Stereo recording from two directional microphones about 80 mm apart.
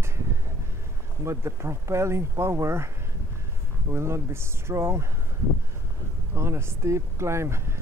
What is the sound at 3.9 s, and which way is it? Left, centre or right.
Speech, right.